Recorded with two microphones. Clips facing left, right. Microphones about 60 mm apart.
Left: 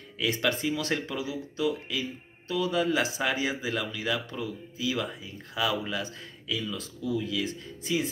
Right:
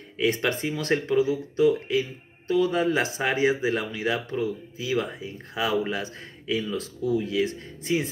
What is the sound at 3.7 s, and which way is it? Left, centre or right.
Speech, right.